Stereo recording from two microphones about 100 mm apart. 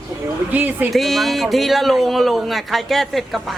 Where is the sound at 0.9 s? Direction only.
Centre (ahead or behind).